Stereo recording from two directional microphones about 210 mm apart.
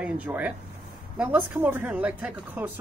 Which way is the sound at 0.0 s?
5° right (ahead or behind).